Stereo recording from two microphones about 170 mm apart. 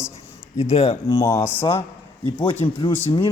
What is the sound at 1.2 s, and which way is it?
Speech, 20° left (ahead or behind).